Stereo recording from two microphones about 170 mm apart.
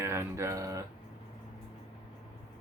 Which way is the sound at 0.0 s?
15° right (ahead or behind).